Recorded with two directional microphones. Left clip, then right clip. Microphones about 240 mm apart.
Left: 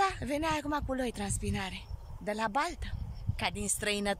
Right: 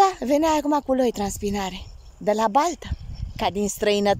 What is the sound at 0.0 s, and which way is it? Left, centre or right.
Speech, right.